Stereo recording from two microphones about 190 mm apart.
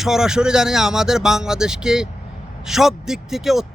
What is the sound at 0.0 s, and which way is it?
Speech, centre (ahead or behind).